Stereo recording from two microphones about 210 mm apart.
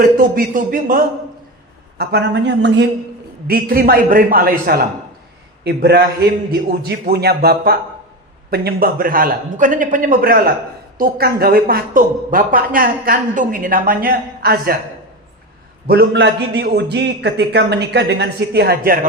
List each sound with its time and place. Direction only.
0.0 s speech: 40° right (ahead or behind)
2.0 s speech: 55° right (ahead or behind)
3.4 s speech: 45° right (ahead or behind)
15.9 s speech: 50° right (ahead or behind)